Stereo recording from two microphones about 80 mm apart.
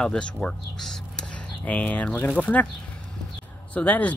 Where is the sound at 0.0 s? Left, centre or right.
Centre.